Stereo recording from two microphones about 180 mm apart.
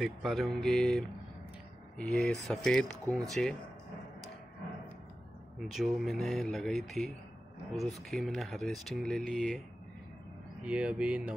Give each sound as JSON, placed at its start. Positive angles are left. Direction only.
{"t": 0.0, "sound": "speech", "side_deg": 0}
{"t": 5.6, "sound": "speech", "side_deg": 0}
{"t": 10.6, "sound": "speech", "side_deg": -5}